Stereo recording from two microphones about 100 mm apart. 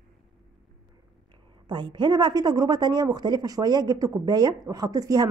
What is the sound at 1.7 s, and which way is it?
Speech, 50° right (ahead or behind).